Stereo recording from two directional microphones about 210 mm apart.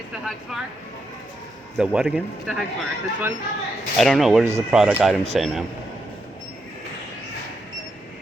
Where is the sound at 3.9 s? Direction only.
Centre (ahead or behind).